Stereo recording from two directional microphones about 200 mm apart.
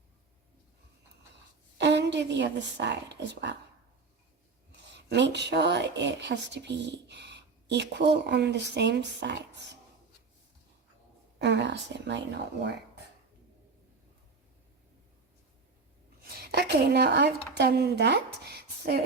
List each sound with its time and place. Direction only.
1.8 s a woman's voice: 60° right (ahead or behind)
4.9 s speech: 60° right (ahead or behind)
11.3 s speech: 60° right (ahead or behind)
16.4 s a woman's voice: 50° right (ahead or behind)